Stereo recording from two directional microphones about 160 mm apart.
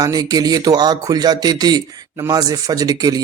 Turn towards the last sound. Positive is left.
turn(degrees=-25)  # may be behind; listen again after turning